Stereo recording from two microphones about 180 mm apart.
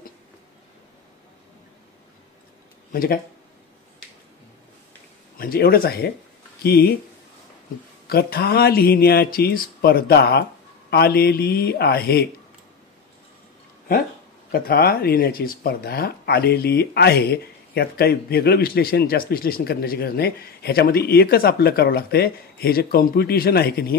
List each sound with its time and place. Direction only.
2.9 s speech: 55° left (ahead or behind)
5.4 s speech: 55° left (ahead or behind)
8.1 s speech: 60° left (ahead or behind)
14.5 s speech: 55° left (ahead or behind)